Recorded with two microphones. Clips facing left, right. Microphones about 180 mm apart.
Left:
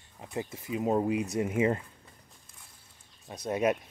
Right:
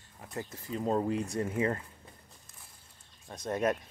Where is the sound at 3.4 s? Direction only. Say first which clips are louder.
Left 2 dB; 15° left (ahead or behind).